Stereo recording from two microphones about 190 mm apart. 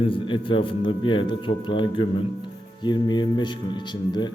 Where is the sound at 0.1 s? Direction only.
25° left (ahead or behind).